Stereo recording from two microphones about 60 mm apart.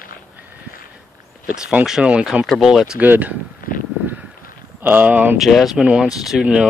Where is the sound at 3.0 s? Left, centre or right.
Right.